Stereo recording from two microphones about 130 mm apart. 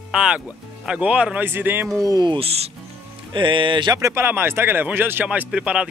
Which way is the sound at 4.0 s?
20° right (ahead or behind).